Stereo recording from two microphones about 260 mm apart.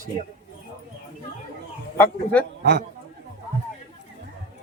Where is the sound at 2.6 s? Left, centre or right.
Right.